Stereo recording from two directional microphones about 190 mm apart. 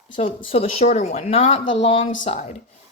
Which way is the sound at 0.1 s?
25° left (ahead or behind).